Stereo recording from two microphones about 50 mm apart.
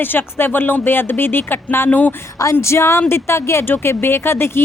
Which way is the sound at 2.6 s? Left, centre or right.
Left.